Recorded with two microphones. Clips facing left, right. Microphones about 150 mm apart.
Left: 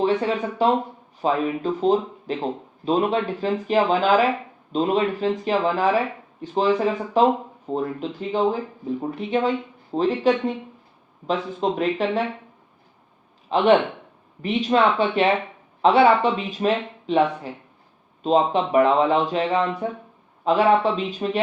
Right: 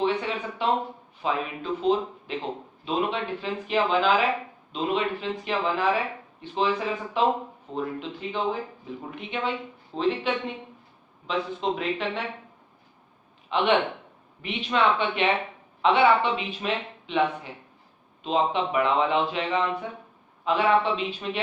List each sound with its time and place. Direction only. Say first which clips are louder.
0.0 s speech: left 5 dB; 40° left (ahead or behind)
13.5 s speech: left 6 dB; 40° left (ahead or behind)